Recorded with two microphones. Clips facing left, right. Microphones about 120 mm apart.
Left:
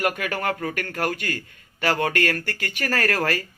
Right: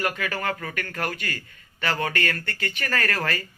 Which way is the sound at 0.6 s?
40° left (ahead or behind).